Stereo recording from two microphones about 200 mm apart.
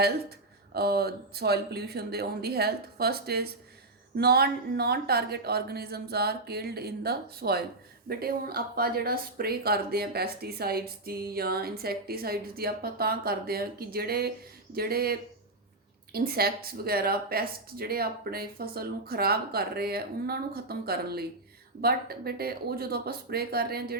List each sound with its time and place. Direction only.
0.0 s speech: 50° right (ahead or behind)